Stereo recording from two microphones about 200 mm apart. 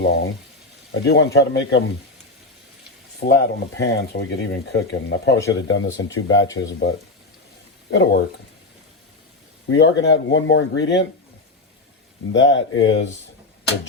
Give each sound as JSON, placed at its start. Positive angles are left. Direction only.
{"t": 0.0, "sound": "speech", "side_deg": 60}
{"t": 3.2, "sound": "speech", "side_deg": 55}
{"t": 6.6, "sound": "speech", "side_deg": 60}
{"t": 9.7, "sound": "speech", "side_deg": 60}
{"t": 12.3, "sound": "speech", "side_deg": 65}